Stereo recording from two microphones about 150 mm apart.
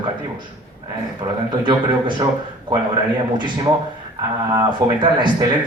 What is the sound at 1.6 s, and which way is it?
Speech, 30° right (ahead or behind).